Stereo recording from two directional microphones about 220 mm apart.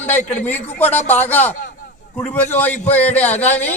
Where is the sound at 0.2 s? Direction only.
30° left (ahead or behind).